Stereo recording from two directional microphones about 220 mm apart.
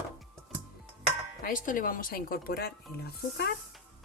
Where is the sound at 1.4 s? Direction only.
40° left (ahead or behind).